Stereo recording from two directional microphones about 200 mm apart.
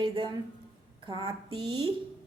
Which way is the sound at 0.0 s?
25° right (ahead or behind).